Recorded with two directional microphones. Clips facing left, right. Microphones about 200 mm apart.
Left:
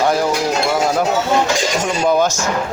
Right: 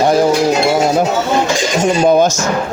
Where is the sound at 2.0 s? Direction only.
20° right (ahead or behind).